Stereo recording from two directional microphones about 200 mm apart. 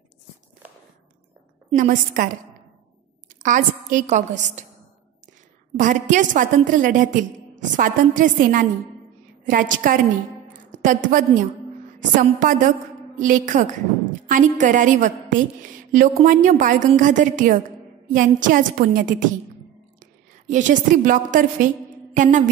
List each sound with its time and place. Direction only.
1.7 s a woman's voice: 40° right (ahead or behind)
3.4 s a woman's voice: 40° right (ahead or behind)
5.8 s a woman's voice: 40° right (ahead or behind)
22.1 s music: 40° right (ahead or behind)